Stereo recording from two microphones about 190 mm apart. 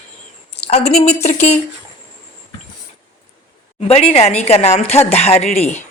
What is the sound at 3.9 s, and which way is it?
Speech, 35° left (ahead or behind).